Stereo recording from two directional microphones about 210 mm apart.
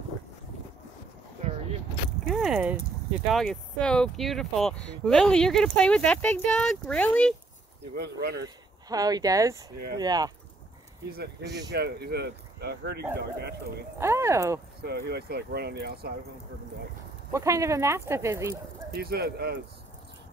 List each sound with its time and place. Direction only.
2.2 s a sound: centre (ahead or behind)
3.3 s speech: centre (ahead or behind)
7.9 s speech: 50° right (ahead or behind)
8.8 s speech: 20° right (ahead or behind)
11.1 s speech: 45° right (ahead or behind)
13.9 s speech: 10° right (ahead or behind)
14.8 s speech: 50° right (ahead or behind)
17.3 s speech: 15° right (ahead or behind)
18.9 s speech: 45° right (ahead or behind)